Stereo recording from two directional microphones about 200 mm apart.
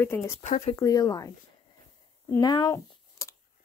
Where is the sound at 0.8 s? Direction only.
15° left (ahead or behind).